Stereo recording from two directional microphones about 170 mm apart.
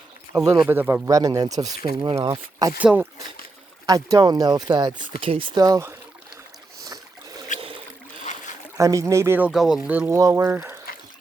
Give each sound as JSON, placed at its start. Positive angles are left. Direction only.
{"t": 0.3, "sound": "speech", "side_deg": -20}
{"t": 2.7, "sound": "speech", "side_deg": -10}
{"t": 3.8, "sound": "speech", "side_deg": -20}
{"t": 6.8, "sound": "boat", "side_deg": -20}
{"t": 7.6, "sound": "boat", "side_deg": -35}
{"t": 8.8, "sound": "speech", "side_deg": -20}
{"t": 9.5, "sound": "speech", "side_deg": 0}